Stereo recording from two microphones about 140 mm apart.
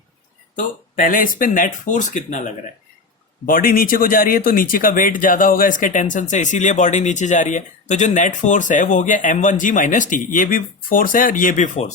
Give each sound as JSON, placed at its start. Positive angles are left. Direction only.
{"t": 0.5, "sound": "speech", "side_deg": 75}
{"t": 3.4, "sound": "speech", "side_deg": 90}